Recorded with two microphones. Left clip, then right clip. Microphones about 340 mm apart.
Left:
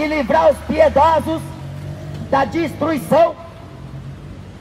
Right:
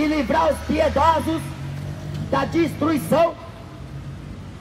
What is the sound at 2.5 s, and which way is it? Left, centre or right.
Speech, centre.